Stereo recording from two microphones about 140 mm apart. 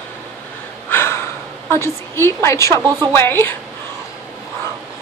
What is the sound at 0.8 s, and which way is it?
Gasp, 15° left (ahead or behind).